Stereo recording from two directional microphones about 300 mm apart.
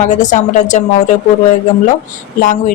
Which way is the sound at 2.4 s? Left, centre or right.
Left.